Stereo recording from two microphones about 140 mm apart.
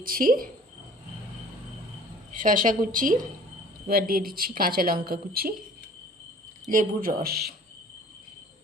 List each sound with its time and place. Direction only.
0.0 s a woman's voice: 90° right
2.3 s a woman's voice: 75° right (ahead or behind)
3.8 s a woman's voice: 90° right
6.7 s a woman's voice: 75° right (ahead or behind)